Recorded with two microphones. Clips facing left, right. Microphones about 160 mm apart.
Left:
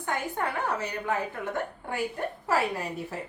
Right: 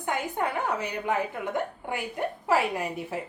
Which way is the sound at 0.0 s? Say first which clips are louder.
Right 2 dB; 15° right (ahead or behind).